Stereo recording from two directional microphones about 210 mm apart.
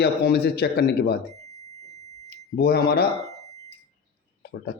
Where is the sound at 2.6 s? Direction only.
50° left (ahead or behind).